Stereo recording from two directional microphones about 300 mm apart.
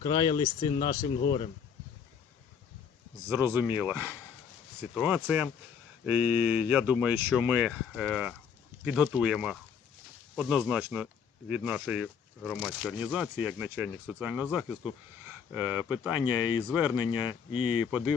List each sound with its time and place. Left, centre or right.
0.0 s speech: centre
3.2 s speech: centre
16.2 s speech: centre
16.6 s speech: centre
17.0 s speech: centre